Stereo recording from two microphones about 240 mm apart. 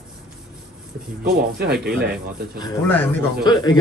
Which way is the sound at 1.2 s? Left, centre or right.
Right.